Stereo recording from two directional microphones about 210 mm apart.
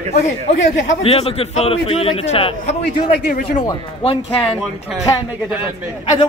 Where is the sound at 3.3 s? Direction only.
40° left (ahead or behind).